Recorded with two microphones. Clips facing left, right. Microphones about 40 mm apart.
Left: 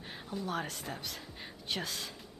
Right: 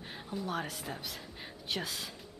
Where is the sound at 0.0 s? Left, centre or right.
Centre.